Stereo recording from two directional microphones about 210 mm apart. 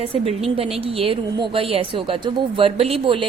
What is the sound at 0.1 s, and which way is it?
A woman's voice, 25° right (ahead or behind).